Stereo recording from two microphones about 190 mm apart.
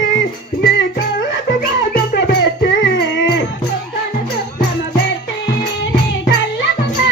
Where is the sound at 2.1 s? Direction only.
65° left (ahead or behind).